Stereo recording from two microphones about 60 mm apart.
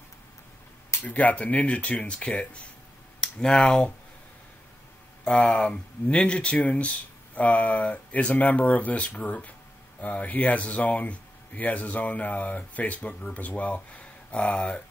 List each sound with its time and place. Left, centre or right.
1.0 s speech: left
5.2 s speech: centre